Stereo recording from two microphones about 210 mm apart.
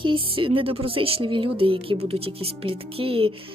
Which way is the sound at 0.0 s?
25° right (ahead or behind).